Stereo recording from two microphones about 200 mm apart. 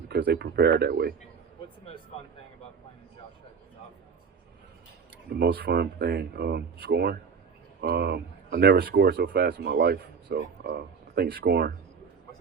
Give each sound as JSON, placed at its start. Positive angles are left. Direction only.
{"t": 0.1, "sound": "speech", "side_deg": -50}
{"t": 5.3, "sound": "speech", "side_deg": -50}